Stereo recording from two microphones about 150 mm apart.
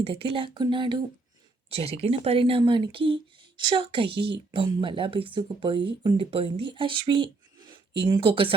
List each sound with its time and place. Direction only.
0.0 s speech: 40° right (ahead or behind)
4.1 s speech: 90° right
4.5 s speech: 35° right (ahead or behind)